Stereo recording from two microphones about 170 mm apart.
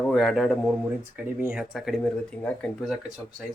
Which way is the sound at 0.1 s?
Centre (ahead or behind).